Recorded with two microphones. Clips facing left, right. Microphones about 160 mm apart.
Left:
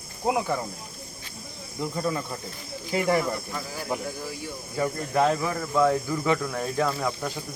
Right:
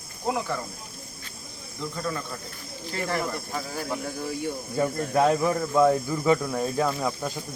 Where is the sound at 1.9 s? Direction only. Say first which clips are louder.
Left 3 dB; 15° left (ahead or behind).